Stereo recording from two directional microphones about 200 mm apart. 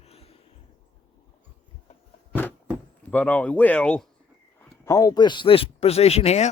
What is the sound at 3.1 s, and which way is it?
Speech, 10° left (ahead or behind).